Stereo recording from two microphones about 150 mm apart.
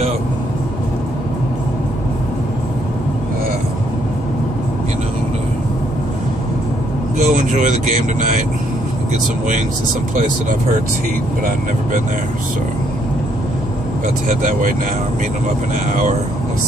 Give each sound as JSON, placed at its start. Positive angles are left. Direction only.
{"t": 7.2, "sound": "speech", "side_deg": -55}
{"t": 14.4, "sound": "speech", "side_deg": -60}